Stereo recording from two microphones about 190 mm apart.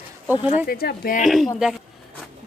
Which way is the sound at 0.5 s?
50° left (ahead or behind).